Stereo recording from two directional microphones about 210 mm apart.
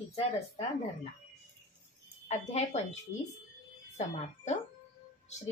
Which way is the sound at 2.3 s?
30° left (ahead or behind).